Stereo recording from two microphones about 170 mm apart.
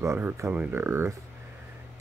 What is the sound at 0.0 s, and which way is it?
Speech, 15° right (ahead or behind).